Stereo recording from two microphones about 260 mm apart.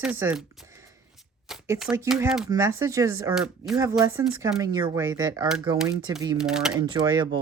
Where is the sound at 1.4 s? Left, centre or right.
Centre.